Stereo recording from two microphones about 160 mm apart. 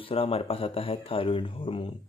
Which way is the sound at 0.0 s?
35° left (ahead or behind).